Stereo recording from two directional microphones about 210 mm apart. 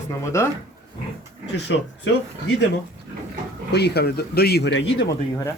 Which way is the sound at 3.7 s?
50° left (ahead or behind).